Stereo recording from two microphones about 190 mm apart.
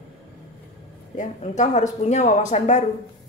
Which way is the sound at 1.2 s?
40° left (ahead or behind).